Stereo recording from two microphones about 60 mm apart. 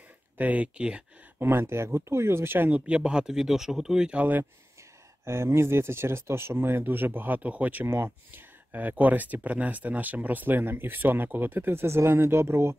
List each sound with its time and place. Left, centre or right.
0.4 s speech: right
1.4 s speech: right
2.7 s speech: centre
4.2 s speech: right
5.2 s speech: right